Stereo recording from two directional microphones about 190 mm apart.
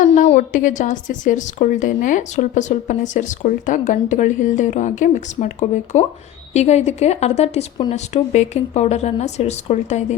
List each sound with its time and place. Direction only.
0.3 s a woman's voice: 40° left (ahead or behind)